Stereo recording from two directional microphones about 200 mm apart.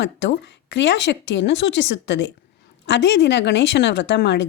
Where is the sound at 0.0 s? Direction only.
60° left (ahead or behind).